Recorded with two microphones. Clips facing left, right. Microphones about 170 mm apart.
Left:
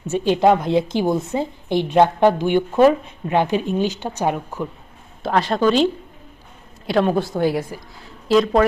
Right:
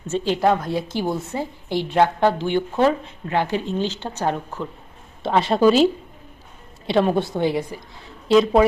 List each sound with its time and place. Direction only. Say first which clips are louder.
0.1 s a woman's voice: left 4 dB; 20° left (ahead or behind)
5.2 s a woman's voice: right 1 dB; centre (ahead or behind)